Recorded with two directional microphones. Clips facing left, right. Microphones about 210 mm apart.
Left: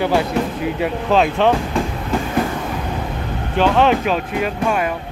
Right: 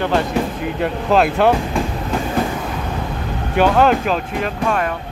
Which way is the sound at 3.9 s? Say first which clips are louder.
Even; 5° left (ahead or behind).